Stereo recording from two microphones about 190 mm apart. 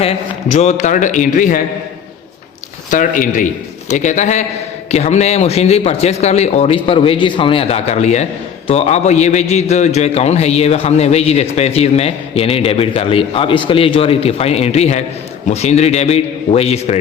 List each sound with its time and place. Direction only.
0.0 s speech: 35° left (ahead or behind)
2.9 s a man's voice: 45° left (ahead or behind)